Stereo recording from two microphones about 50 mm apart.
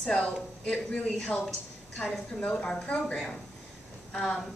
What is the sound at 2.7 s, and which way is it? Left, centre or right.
Speech, centre.